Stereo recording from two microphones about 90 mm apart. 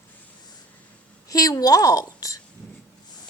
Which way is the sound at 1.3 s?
45° left (ahead or behind).